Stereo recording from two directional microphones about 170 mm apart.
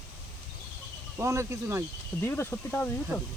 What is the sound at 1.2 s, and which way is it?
Speech, 20° right (ahead or behind).